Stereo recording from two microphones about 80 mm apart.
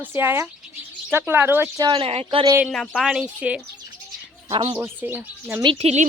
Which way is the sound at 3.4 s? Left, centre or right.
Centre.